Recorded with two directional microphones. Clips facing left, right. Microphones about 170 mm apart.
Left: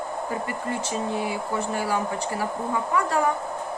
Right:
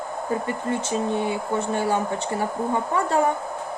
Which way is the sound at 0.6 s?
25° right (ahead or behind).